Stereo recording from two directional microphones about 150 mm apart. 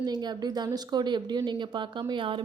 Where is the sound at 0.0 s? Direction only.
30° right (ahead or behind).